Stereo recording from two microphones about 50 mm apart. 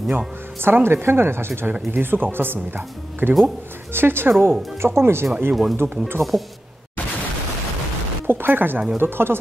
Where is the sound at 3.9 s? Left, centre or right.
Right.